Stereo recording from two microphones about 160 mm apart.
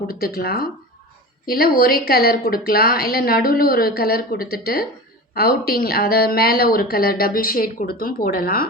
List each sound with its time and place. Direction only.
0.1 s a woman's voice: 65° left (ahead or behind)